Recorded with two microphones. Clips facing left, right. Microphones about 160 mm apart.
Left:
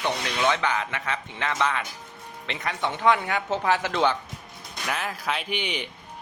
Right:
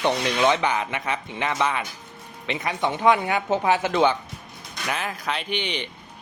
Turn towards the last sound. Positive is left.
turn(degrees=5)  # may be behind; listen again after turning